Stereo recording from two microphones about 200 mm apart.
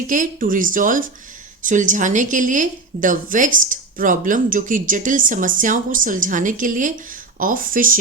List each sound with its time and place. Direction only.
0.1 s a woman's voice: 40° right (ahead or behind)